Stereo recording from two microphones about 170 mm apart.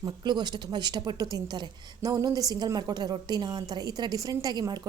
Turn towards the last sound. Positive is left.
turn(degrees=-20)  # may be behind; listen again after turning